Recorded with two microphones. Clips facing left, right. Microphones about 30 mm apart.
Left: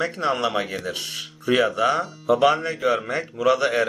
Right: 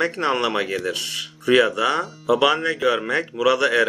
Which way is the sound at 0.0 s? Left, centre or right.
Right.